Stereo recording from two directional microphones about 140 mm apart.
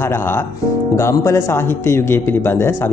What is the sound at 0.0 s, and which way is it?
Speech, 15° left (ahead or behind).